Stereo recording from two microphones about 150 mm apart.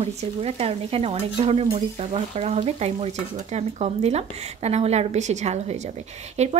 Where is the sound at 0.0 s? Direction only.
45° right (ahead or behind).